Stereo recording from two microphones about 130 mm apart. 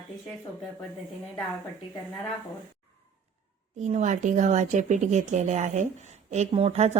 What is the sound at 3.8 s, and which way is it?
Speech, 65° right (ahead or behind).